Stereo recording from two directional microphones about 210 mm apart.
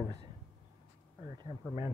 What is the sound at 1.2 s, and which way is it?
Speech, 20° right (ahead or behind).